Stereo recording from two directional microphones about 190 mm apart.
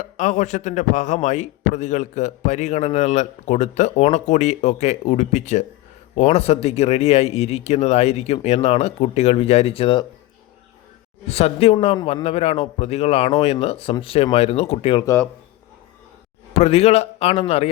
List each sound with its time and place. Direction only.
0.0 s a man's voice: 40° left (ahead or behind)
11.3 s a man's voice: 30° left (ahead or behind)
15.0 s speech: 10° left (ahead or behind)
16.6 s a man's voice: 30° left (ahead or behind)